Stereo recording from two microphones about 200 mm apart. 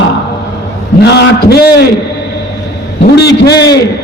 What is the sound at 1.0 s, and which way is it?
Speech, 55° left (ahead or behind).